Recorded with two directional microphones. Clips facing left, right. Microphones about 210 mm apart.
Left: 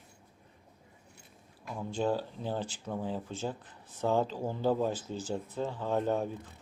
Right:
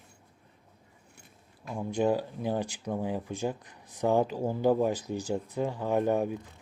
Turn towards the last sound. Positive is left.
turn(degrees=-15)  # may be behind; listen again after turning